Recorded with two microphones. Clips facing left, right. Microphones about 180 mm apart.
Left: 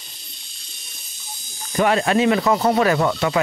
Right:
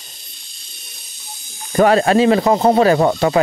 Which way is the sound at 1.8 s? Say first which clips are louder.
Right 5 dB; 40° right (ahead or behind).